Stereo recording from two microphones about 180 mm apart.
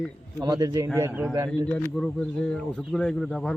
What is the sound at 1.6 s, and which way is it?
A man's voice, 5° left (ahead or behind).